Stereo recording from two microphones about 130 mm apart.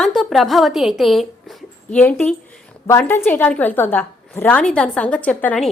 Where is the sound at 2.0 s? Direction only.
15° left (ahead or behind).